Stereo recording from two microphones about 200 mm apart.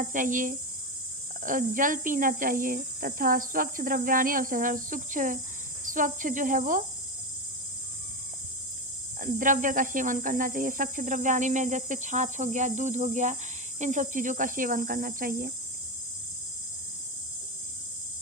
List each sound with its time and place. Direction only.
0.0 s speech: 40° right (ahead or behind)
9.2 s speech: 40° right (ahead or behind)